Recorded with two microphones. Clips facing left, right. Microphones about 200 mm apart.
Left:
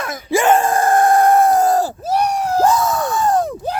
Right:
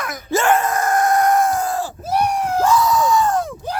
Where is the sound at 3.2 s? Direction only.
35° left (ahead or behind).